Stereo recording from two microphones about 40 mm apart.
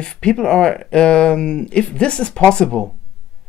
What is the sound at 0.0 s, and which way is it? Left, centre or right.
Speech, left.